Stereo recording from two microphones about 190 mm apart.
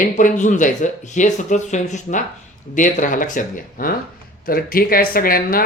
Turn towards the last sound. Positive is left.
turn(degrees=50)  # may be behind; listen again after turning